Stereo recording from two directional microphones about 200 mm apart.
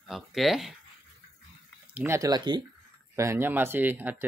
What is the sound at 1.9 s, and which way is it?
Speech, 10° right (ahead or behind).